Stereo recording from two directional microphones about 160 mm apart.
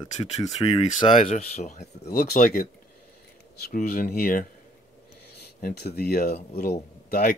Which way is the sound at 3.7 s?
60° left (ahead or behind).